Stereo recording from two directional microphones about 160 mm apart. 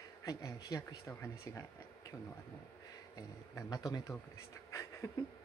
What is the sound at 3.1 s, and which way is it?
Speech, 25° left (ahead or behind).